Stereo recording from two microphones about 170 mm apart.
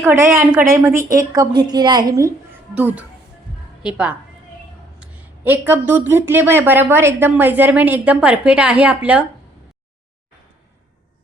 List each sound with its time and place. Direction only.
0.0 s speech: 15° right (ahead or behind)
2.7 s speech: 10° right (ahead or behind)